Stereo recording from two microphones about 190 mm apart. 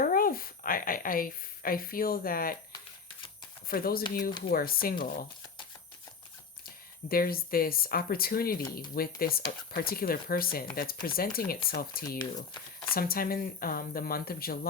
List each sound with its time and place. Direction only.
0.0 s a woman's voice: 50° left (ahead or behind)
3.7 s speech: 50° left (ahead or behind)
7.1 s speech: 50° left (ahead or behind)